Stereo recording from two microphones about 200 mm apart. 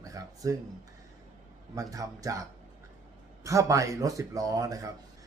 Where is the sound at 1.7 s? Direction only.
15° right (ahead or behind).